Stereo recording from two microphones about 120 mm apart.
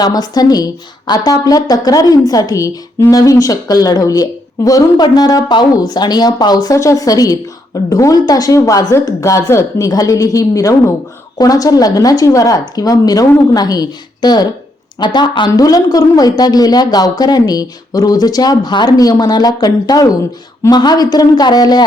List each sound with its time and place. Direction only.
0.0 s a woman's voice: 35° left (ahead or behind)